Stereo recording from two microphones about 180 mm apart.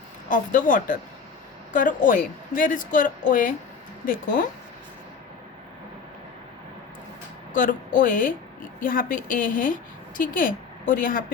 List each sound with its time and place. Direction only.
0.3 s a woman's voice: 45° left (ahead or behind)
7.5 s a woman's voice: 50° left (ahead or behind)